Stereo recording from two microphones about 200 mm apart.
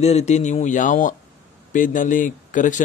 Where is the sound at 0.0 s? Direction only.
35° left (ahead or behind).